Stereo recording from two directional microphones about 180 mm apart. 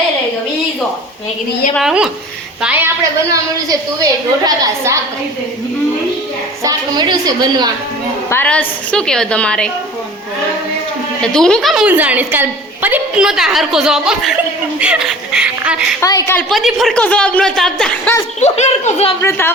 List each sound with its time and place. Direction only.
1.7 s a woman's voice: 5° right (ahead or behind)
3.0 s a woman's voice: 20° right (ahead or behind)
6.6 s a woman's voice: 20° right (ahead or behind)
8.3 s a woman's voice: 10° left (ahead or behind)
11.2 s a woman's voice: 5° left (ahead or behind)
16.0 s a woman's voice: 15° left (ahead or behind)
18.3 s speech: 40° left (ahead or behind)
19.2 s a woman's voice: 10° left (ahead or behind)